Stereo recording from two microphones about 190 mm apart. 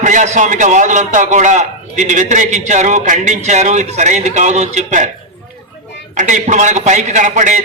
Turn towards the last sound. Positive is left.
turn(degrees=-40)  # may be behind; listen again after turning